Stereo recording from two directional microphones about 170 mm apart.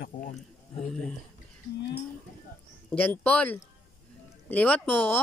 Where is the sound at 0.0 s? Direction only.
55° left (ahead or behind).